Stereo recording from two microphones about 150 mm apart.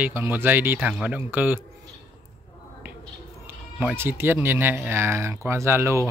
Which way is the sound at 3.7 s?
10° right (ahead or behind).